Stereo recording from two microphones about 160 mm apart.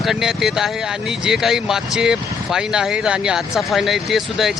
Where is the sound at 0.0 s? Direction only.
Centre (ahead or behind).